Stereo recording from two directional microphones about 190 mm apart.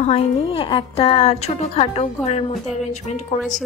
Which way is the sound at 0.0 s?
35° left (ahead or behind).